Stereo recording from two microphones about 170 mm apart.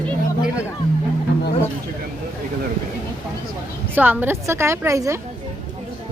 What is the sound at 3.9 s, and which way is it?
A woman's voice, 10° right (ahead or behind).